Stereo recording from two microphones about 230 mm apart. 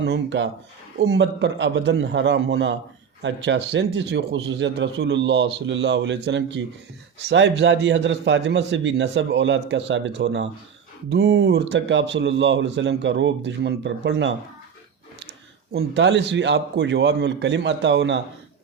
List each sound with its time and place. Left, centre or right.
0.0 s a man's voice: right
15.7 s a man's voice: right